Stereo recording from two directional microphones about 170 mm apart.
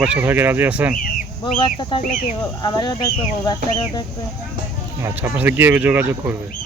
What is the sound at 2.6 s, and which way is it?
Speech, 25° left (ahead or behind).